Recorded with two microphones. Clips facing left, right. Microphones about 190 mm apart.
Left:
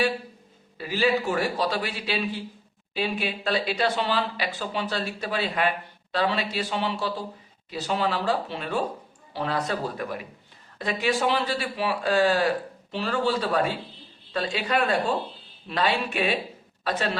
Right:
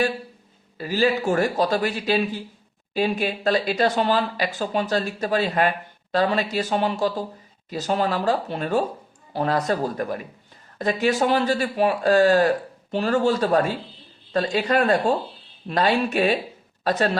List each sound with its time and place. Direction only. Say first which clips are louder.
0.8 s a man's voice: right 3 dB; 45° right (ahead or behind)